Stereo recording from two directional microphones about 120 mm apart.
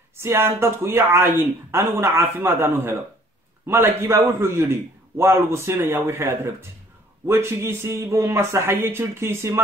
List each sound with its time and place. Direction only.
0.2 s a man's voice: 20° right (ahead or behind)